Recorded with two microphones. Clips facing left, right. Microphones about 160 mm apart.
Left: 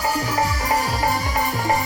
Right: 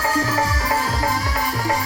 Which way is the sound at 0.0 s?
15° left (ahead or behind).